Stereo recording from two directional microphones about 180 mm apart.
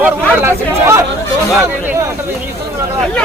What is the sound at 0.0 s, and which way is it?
Speech, 15° right (ahead or behind).